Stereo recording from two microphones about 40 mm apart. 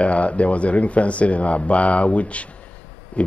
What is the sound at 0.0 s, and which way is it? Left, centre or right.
A man's voice, left.